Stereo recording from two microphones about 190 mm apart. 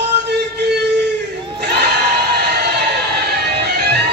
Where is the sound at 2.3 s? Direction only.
60° right (ahead or behind).